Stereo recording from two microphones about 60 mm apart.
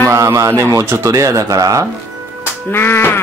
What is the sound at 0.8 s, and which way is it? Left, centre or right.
Speech, right.